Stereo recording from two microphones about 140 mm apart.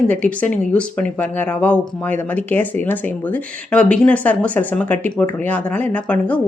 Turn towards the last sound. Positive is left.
turn(degrees=10)  # may be behind; listen again after turning